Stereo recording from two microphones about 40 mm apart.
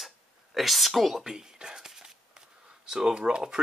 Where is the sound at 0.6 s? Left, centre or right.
Centre.